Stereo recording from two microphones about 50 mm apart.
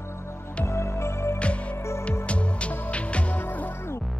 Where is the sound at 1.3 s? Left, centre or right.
Left.